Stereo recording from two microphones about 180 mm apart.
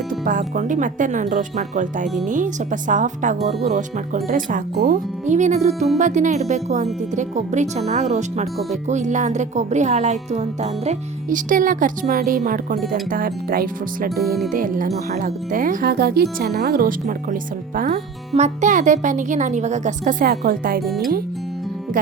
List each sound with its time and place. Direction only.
0.3 s speech: 45° right (ahead or behind)
14.2 s speech: centre (ahead or behind)
14.5 s speech: 50° right (ahead or behind)
17.7 s speech: 45° right (ahead or behind)
20.8 s speech: centre (ahead or behind)